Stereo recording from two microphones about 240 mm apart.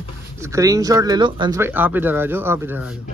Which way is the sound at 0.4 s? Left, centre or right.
Centre.